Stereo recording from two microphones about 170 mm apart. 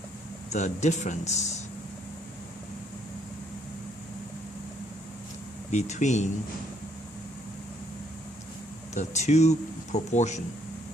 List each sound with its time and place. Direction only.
0.5 s speech: 40° left (ahead or behind)
5.7 s speech: 45° left (ahead or behind)
9.0 s speech: 40° left (ahead or behind)